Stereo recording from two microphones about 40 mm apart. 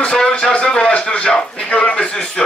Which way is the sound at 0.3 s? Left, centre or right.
Left.